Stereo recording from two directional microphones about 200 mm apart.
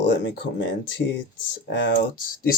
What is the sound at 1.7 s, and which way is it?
Speech, 60° left (ahead or behind).